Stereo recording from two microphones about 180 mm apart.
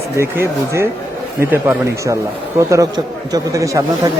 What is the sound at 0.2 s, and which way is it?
Speech, 15° right (ahead or behind).